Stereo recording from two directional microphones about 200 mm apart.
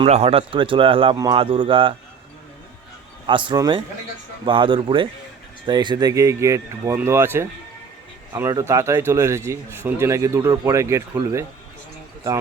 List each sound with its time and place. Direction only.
0.0 s speech: 30° right (ahead or behind)
3.2 s speech: 25° right (ahead or behind)